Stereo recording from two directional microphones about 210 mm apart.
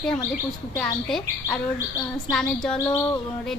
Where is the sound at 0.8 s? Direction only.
5° left (ahead or behind).